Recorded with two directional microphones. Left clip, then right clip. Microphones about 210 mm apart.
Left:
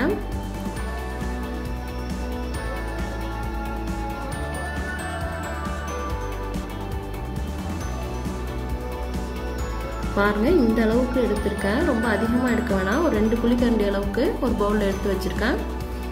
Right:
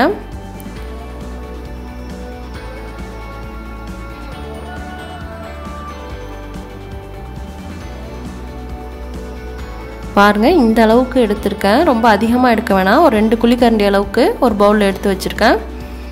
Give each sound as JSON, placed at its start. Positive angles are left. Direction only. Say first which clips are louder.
{"t": 10.1, "sound": "speech", "louder": "right 10 dB", "side_deg": -45}